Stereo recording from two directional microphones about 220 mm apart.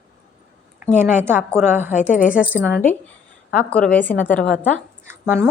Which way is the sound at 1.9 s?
35° left (ahead or behind).